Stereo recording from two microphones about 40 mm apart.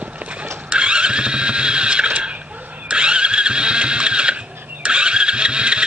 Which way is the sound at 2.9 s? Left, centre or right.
Right.